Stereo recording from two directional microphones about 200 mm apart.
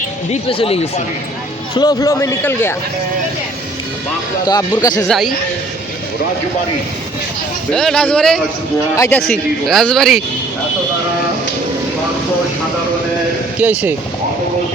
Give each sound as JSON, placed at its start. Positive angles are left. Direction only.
{"t": 0.3, "sound": "speech", "side_deg": 30}
{"t": 1.7, "sound": "a man's voice", "side_deg": 20}
{"t": 4.4, "sound": "speech", "side_deg": 20}
{"t": 5.0, "sound": "speech", "side_deg": 0}
{"t": 7.7, "sound": "speech", "side_deg": 5}
{"t": 13.6, "sound": "speech", "side_deg": -10}